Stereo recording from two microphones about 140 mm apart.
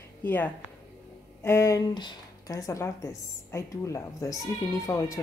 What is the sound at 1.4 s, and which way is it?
Speech, 20° left (ahead or behind).